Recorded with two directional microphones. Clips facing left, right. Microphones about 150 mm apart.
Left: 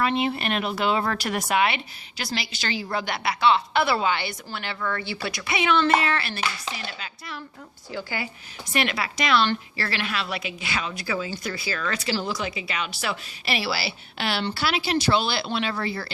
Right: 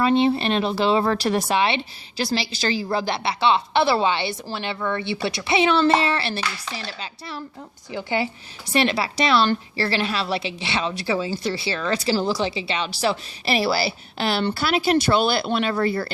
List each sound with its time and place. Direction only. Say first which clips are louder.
0.0 s a woman's voice: right 6 dB; 30° right (ahead or behind)
7.9 s a woman's voice: right 7 dB; 20° right (ahead or behind); by 16.1 s 50° right (ahead or behind)